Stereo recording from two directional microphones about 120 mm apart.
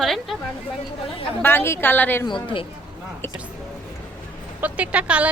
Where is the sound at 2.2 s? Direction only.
45° left (ahead or behind).